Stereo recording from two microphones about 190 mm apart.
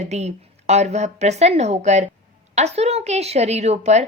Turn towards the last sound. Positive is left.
turn(degrees=-35)  # may be behind; listen again after turning